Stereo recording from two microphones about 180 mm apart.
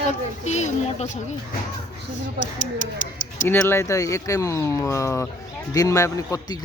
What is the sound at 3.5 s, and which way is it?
A man's voice, 10° left (ahead or behind).